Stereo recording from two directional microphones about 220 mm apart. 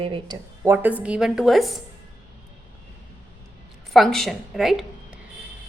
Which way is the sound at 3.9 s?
Centre (ahead or behind).